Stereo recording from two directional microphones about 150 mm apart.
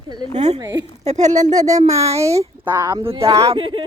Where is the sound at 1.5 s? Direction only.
25° right (ahead or behind).